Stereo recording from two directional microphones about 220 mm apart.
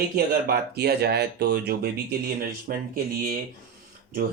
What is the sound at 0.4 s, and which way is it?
Speech, 45° right (ahead or behind).